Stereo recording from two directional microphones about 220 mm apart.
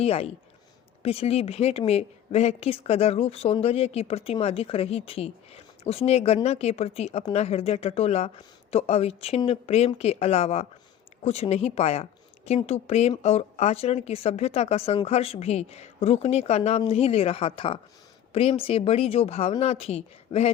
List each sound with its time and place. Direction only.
0.0 s a woman's voice: 25° left (ahead or behind)